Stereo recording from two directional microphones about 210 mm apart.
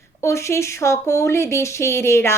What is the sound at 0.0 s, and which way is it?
Speech, 15° left (ahead or behind).